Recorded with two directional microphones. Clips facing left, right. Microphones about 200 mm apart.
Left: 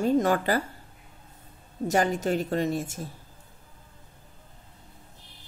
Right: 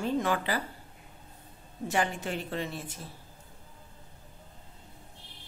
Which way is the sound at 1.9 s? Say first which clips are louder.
Left 6 dB; 40° left (ahead or behind).